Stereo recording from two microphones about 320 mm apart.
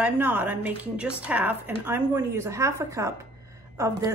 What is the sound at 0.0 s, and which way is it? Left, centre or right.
A woman's voice, centre.